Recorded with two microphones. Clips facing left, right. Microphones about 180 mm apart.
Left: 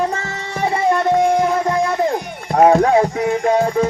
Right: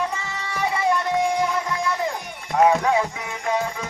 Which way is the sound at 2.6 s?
45° left (ahead or behind).